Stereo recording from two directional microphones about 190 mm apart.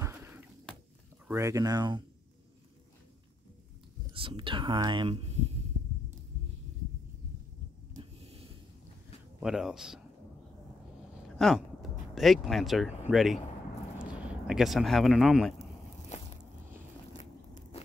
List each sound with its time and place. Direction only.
0.0 s a sound: 10° right (ahead or behind)
1.2 s speech: 15° right (ahead or behind)
4.1 s speech: 25° right (ahead or behind)
9.4 s speech: 5° right (ahead or behind)
11.2 s speech: centre (ahead or behind)